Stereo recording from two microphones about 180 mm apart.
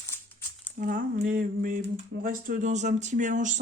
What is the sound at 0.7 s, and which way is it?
Speech, 45° right (ahead or behind).